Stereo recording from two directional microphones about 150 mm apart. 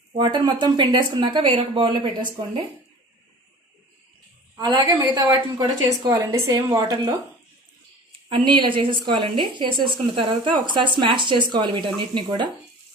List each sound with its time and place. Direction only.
0.1 s a woman's voice: 30° right (ahead or behind)
4.6 s a woman's voice: 30° right (ahead or behind)
8.3 s a woman's voice: 35° right (ahead or behind)